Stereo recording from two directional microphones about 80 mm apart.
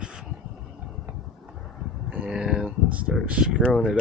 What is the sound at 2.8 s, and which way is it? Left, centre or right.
Speech, centre.